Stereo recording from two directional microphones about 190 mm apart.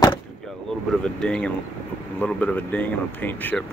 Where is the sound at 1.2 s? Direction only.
5° left (ahead or behind).